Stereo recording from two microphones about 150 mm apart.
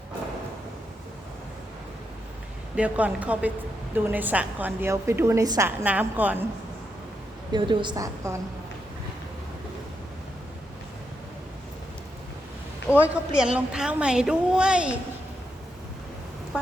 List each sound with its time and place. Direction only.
2.7 s a woman's voice: 10° right (ahead or behind)
7.5 s a woman's voice: 30° right (ahead or behind)
13.0 s a woman's voice: 5° right (ahead or behind)